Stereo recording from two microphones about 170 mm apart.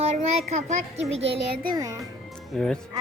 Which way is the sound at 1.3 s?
65° right (ahead or behind).